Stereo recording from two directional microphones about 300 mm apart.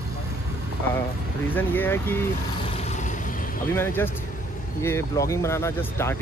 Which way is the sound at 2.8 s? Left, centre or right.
Left.